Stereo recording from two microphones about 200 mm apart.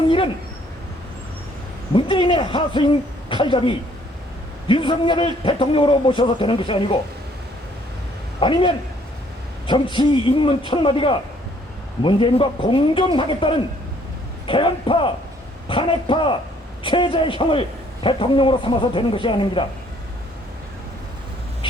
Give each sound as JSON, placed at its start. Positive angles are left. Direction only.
{"t": 1.9, "sound": "a man's voice", "side_deg": 25}
{"t": 8.4, "sound": "a man's voice", "side_deg": 25}